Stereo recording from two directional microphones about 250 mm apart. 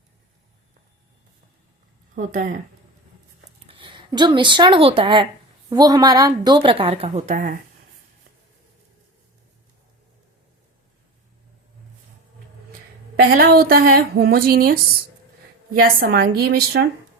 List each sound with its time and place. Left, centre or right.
2.1 s a woman's voice: right
3.7 s speech: centre
13.1 s a woman's voice: right